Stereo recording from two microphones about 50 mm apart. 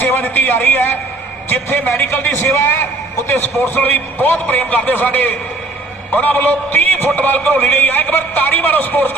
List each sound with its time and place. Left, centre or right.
0.0 s a man's voice: left